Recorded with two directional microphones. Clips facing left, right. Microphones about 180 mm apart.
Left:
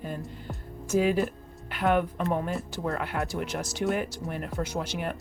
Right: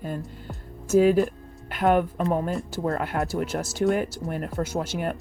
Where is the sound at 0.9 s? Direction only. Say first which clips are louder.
Right 6 dB; 45° right (ahead or behind).